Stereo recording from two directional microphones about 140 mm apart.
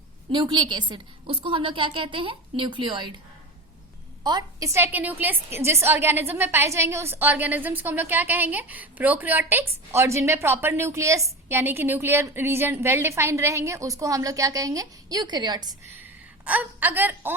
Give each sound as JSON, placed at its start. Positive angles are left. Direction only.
{"t": 0.3, "sound": "a woman's voice", "side_deg": -35}
{"t": 4.2, "sound": "a woman's voice", "side_deg": -30}
{"t": 16.0, "sound": "a woman's voice", "side_deg": -10}